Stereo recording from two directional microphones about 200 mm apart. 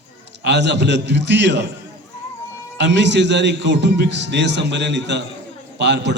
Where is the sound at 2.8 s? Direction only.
60° right (ahead or behind).